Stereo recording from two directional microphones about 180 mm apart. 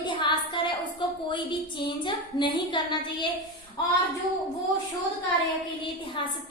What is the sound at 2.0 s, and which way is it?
A woman's voice, 25° left (ahead or behind).